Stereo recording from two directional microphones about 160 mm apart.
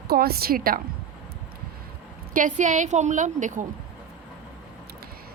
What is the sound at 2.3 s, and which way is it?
Speech, 55° right (ahead or behind).